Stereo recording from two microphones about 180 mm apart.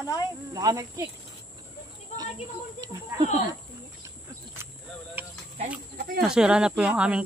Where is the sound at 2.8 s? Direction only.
20° right (ahead or behind).